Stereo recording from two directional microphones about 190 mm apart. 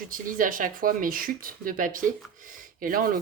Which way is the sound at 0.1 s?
45° right (ahead or behind).